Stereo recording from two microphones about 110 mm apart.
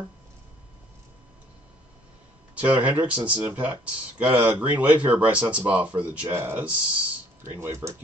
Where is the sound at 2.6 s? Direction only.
15° right (ahead or behind).